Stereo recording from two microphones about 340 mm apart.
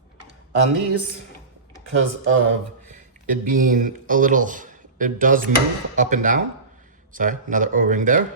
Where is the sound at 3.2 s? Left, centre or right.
Right.